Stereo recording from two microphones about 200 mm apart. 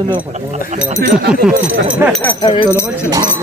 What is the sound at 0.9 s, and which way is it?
Speech, 55° right (ahead or behind).